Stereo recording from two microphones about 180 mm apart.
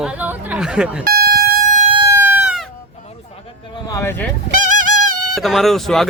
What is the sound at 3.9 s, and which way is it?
Speech, 15° left (ahead or behind).